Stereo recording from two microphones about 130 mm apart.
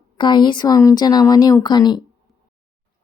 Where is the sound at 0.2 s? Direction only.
35° left (ahead or behind).